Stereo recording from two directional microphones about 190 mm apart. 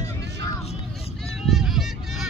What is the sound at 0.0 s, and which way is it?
Vehicle, 20° left (ahead or behind).